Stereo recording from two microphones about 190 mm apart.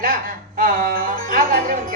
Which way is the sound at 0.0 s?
50° right (ahead or behind).